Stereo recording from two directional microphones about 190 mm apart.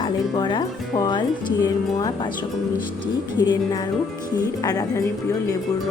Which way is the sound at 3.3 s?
20° left (ahead or behind).